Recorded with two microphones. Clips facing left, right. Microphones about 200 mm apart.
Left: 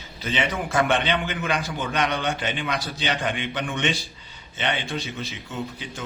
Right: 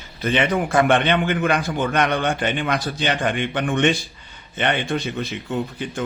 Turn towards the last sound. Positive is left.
turn(degrees=-55)  # may be behind; listen again after turning